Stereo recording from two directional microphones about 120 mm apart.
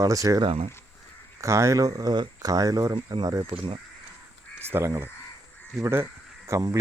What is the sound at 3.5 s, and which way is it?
Speech, 45° right (ahead or behind).